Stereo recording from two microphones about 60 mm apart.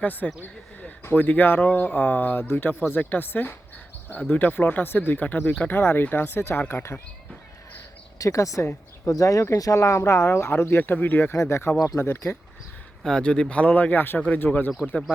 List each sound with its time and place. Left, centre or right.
0.0 s speech: left
0.4 s a sound: left
1.0 s speech: left
8.2 s speech: left
10.0 s speech: left
11.3 s speech: left
11.9 s speech: left
13.0 s speech: centre
13.7 s speech: left